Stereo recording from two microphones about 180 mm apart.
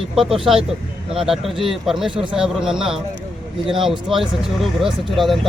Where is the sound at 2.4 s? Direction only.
5° right (ahead or behind).